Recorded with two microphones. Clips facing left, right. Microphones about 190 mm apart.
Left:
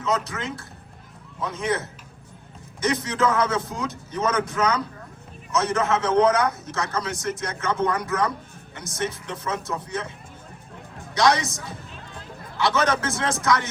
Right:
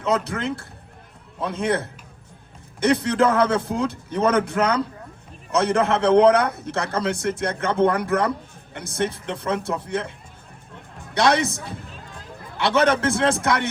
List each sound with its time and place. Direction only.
0.0 s a man's voice: 60° right (ahead or behind)
11.1 s a man's voice: 60° right (ahead or behind)